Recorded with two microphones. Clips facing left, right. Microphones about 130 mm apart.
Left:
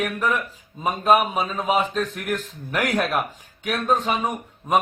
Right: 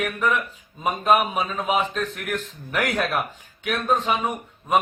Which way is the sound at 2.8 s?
5° left (ahead or behind).